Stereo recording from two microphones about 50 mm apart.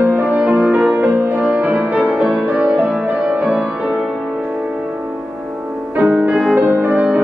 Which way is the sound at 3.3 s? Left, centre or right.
Right.